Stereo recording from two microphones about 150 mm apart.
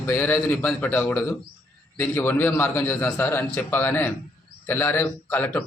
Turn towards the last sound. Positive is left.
turn(degrees=10)  # may be behind; listen again after turning